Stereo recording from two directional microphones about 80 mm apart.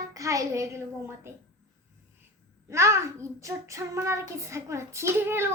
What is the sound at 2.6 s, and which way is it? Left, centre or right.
Child singing, right.